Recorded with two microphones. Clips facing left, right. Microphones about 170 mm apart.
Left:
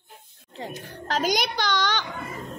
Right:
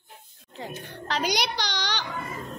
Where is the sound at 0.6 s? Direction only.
35° left (ahead or behind).